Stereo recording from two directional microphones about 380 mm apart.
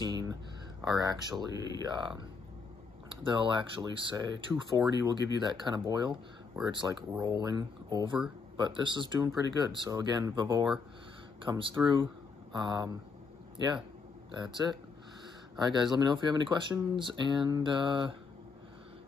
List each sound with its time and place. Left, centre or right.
0.0 s a sound: centre
1.5 s speech: left
1.9 s speech: centre
3.3 s speech: centre
15.5 s speech: centre